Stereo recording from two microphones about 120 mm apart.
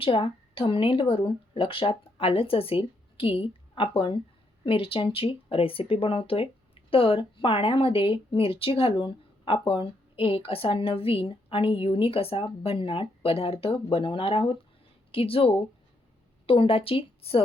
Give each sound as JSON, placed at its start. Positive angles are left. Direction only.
{"t": 0.0, "sound": "speech", "side_deg": 50}